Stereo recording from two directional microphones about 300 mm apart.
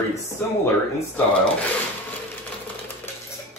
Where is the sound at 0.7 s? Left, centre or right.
Centre.